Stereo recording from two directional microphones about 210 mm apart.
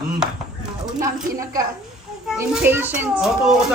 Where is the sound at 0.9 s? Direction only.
15° right (ahead or behind).